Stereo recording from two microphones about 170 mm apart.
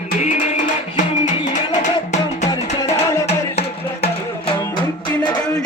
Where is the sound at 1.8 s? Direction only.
45° left (ahead or behind).